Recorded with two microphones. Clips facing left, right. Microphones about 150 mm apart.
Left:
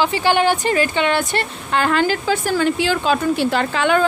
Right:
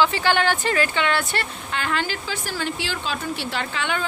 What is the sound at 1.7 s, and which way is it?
Speech, 45° left (ahead or behind).